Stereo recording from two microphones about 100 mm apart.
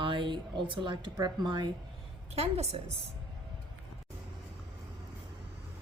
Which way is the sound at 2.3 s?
90° right.